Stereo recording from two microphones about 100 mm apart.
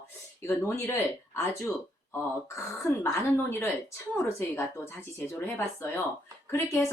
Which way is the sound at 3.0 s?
25° left (ahead or behind).